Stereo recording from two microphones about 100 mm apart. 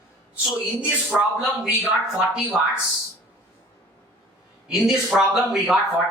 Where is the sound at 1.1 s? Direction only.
10° right (ahead or behind).